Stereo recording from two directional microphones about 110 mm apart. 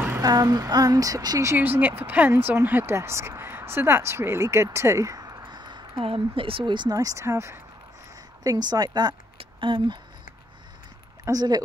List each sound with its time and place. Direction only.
0.2 s speech: 35° right (ahead or behind)
8.5 s a woman's voice: 35° right (ahead or behind)
9.4 s a sound: 50° right (ahead or behind)
11.2 s a woman's voice: 35° right (ahead or behind)